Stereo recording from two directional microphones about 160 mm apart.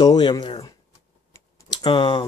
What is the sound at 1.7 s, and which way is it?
Speech, 30° left (ahead or behind).